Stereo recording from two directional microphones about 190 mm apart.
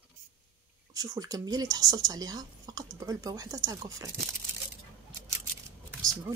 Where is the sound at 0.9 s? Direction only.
20° right (ahead or behind).